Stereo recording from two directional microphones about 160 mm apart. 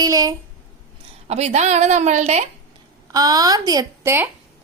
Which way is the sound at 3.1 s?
25° right (ahead or behind).